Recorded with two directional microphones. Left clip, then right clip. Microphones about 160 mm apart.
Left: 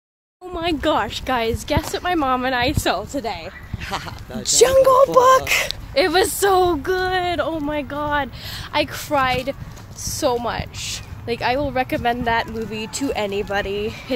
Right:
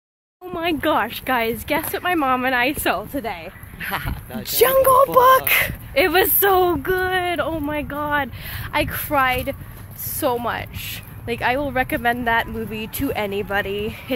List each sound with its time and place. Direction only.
0.5 s speech: 20° right (ahead or behind)
3.8 s speech: 20° left (ahead or behind)
4.4 s speech: 5° left (ahead or behind)
5.9 s speech: 15° right (ahead or behind)
8.7 s speech: 5° right (ahead or behind)